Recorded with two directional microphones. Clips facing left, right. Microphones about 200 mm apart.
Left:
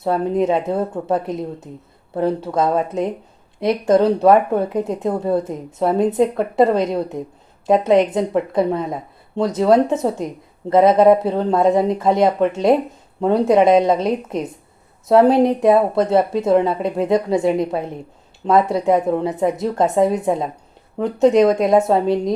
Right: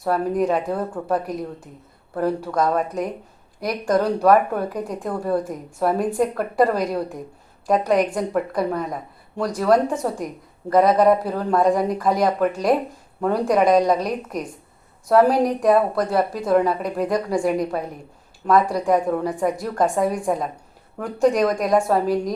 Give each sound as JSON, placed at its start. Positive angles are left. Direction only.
{"t": 0.0, "sound": "speech", "side_deg": 25}